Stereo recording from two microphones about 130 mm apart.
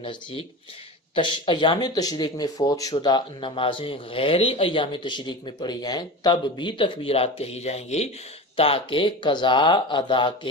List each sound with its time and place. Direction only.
0.0 s speech: 40° left (ahead or behind)
8.5 s speech: 45° left (ahead or behind)